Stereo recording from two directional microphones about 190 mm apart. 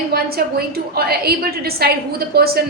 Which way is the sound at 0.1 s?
55° right (ahead or behind).